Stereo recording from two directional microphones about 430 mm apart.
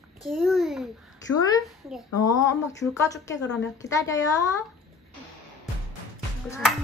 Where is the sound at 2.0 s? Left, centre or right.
Left.